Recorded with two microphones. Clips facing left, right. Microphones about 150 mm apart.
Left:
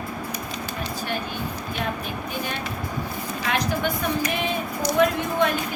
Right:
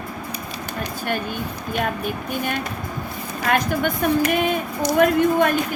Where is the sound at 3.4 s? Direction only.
50° right (ahead or behind).